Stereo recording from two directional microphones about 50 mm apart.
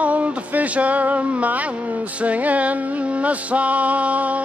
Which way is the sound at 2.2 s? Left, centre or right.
Right.